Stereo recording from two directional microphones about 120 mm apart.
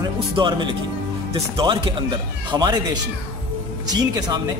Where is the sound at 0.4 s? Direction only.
40° right (ahead or behind).